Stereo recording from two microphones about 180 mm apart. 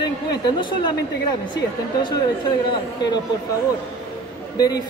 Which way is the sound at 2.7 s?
25° left (ahead or behind).